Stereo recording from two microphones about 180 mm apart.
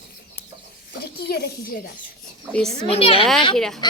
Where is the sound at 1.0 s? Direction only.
60° left (ahead or behind).